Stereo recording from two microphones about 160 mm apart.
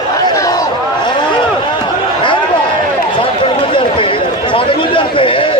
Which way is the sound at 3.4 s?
35° left (ahead or behind).